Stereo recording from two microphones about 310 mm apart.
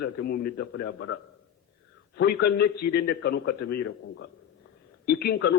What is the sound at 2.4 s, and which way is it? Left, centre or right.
A man's voice, left.